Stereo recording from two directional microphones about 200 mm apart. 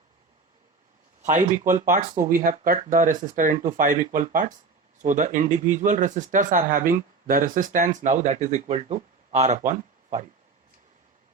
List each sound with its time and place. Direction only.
1.2 s speech: 35° right (ahead or behind)